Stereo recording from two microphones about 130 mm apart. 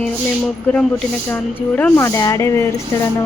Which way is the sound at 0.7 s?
5° left (ahead or behind).